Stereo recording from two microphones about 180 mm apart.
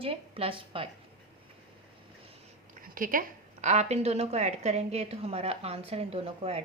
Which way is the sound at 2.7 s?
50° right (ahead or behind).